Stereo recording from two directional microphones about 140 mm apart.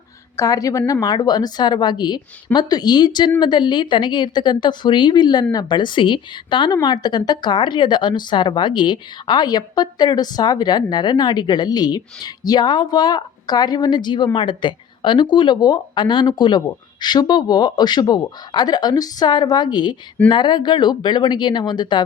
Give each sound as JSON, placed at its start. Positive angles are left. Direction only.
{"t": 0.3, "sound": "speech", "side_deg": 25}